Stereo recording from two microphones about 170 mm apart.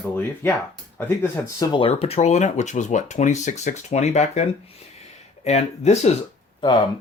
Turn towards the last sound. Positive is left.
turn(degrees=25)  # may be behind; listen again after turning